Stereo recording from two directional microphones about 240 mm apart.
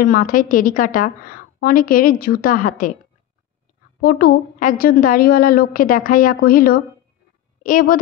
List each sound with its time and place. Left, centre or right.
0.0 s a woman's voice: left
4.0 s a woman's voice: left